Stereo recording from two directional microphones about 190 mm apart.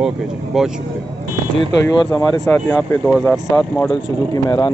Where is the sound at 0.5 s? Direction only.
Centre (ahead or behind).